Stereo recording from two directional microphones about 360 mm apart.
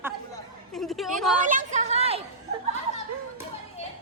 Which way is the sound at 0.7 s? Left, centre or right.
Centre.